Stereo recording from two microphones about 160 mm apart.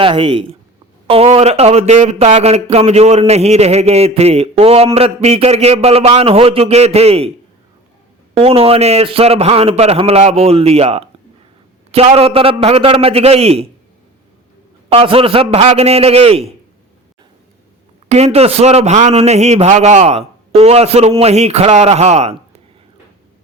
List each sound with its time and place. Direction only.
0.0 s a man's voice: 30° right (ahead or behind)
8.4 s a man's voice: 40° right (ahead or behind)
14.8 s a man's voice: 35° right (ahead or behind)
18.1 s a man's voice: 40° right (ahead or behind)